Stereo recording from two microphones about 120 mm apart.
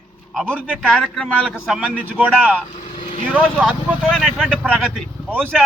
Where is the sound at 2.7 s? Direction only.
90° left.